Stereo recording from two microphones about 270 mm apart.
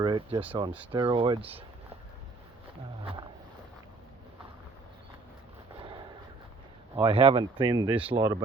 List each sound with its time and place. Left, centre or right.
0.0 s speech: centre
6.9 s speech: centre